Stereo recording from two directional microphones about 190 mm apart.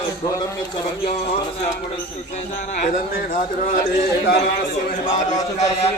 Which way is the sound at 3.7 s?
55° left (ahead or behind).